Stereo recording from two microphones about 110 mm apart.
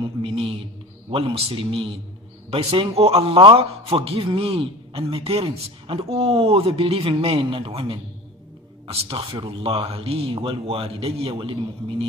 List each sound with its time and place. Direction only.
0.0 s a man's voice: 55° right (ahead or behind)